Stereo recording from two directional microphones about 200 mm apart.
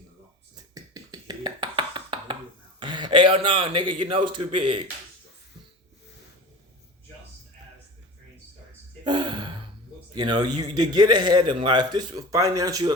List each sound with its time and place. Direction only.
0.5 s a sound: 20° right (ahead or behind)
2.8 s speech: 20° right (ahead or behind)
9.0 s gasp: 20° right (ahead or behind)
10.2 s speech: 20° right (ahead or behind)